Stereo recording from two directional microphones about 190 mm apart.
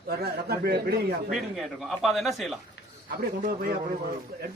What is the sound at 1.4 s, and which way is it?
Speech, centre (ahead or behind).